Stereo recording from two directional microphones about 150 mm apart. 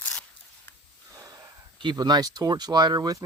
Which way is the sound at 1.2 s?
25° right (ahead or behind).